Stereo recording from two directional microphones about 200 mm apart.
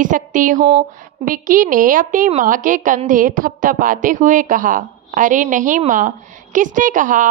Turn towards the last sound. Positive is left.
turn(degrees=-40)  # may be behind; listen again after turning